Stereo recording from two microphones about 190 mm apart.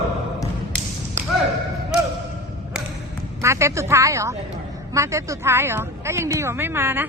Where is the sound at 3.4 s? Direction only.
15° right (ahead or behind).